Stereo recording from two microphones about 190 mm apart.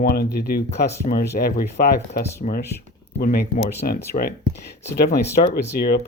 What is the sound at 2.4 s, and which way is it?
Speech, 40° left (ahead or behind).